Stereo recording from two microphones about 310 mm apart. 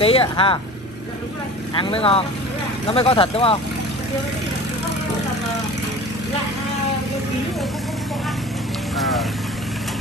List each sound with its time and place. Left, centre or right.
0.0 s speech: centre
1.8 s speech: centre